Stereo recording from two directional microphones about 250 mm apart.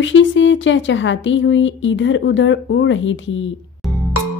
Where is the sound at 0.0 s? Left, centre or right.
Left.